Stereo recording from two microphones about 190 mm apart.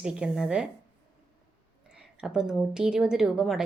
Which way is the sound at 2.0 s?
5° right (ahead or behind).